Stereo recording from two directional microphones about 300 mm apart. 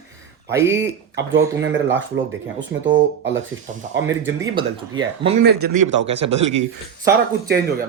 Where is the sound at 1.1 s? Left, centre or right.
Right.